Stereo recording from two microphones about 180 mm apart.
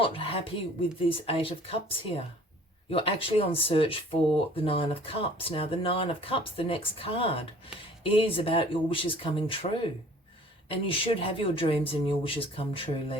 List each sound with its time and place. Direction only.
0.0 s speech: 30° left (ahead or behind)
10.7 s speech: 30° left (ahead or behind)